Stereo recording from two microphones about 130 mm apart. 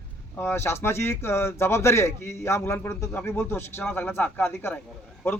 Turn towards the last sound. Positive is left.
turn(degrees=20)  # may be behind; listen again after turning